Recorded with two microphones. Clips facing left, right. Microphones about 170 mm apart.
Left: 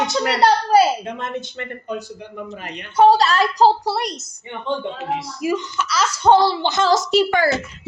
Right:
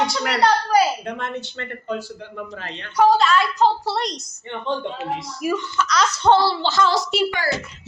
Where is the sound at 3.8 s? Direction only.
10° left (ahead or behind).